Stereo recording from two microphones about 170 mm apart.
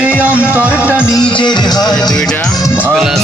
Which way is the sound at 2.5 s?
20° left (ahead or behind).